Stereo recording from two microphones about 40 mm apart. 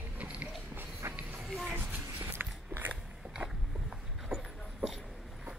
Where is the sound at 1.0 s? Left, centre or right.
Right.